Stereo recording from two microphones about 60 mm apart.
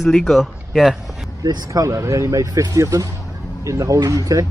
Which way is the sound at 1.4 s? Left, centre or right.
Right.